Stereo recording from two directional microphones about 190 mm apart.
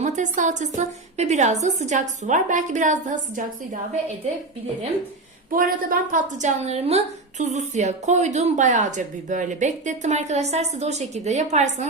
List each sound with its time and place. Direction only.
0.0 s a woman's voice: 40° right (ahead or behind)
5.5 s a woman's voice: 45° right (ahead or behind)